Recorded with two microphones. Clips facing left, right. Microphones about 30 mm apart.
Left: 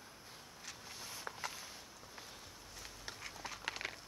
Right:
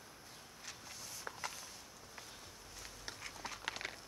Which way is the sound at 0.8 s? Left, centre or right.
Centre.